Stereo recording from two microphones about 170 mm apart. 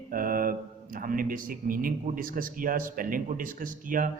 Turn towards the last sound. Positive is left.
turn(degrees=-50)  # may be behind; listen again after turning